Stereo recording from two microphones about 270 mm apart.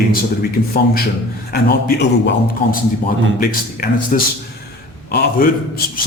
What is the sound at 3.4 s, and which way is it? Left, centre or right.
A man's voice, left.